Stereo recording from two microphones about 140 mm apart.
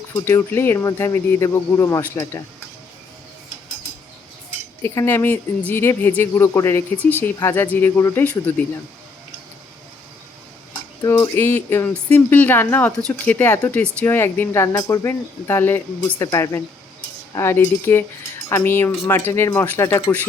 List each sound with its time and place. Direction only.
0.2 s speech: 20° left (ahead or behind)
4.8 s speech: 15° left (ahead or behind)
11.0 s speech: 20° left (ahead or behind)